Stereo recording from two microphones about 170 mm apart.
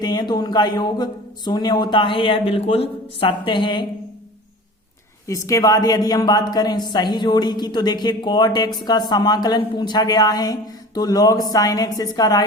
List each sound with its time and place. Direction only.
0.0 s a woman's voice: 25° left (ahead or behind)
5.2 s a woman's voice: 20° left (ahead or behind)